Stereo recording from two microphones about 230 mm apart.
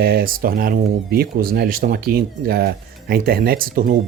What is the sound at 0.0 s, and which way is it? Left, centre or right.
Speech, right.